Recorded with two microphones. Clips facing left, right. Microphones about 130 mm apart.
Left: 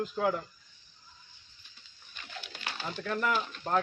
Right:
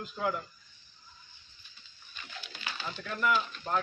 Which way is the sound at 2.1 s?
65° left (ahead or behind).